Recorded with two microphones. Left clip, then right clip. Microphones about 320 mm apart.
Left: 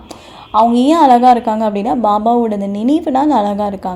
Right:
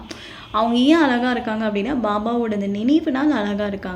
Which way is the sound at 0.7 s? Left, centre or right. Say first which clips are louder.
Left 6 dB; left.